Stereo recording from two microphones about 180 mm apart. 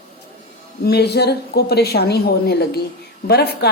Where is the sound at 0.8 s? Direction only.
65° left (ahead or behind).